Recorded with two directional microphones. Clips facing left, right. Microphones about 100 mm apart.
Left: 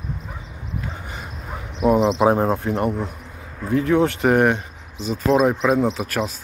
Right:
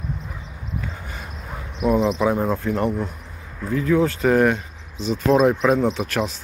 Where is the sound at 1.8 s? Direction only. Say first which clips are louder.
Left 2 dB; 30° left (ahead or behind).